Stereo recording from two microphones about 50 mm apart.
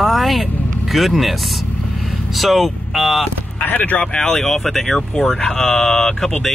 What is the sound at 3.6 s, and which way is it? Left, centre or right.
Speech, left.